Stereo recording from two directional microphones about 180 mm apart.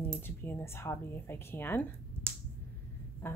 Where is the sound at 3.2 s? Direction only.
10° left (ahead or behind).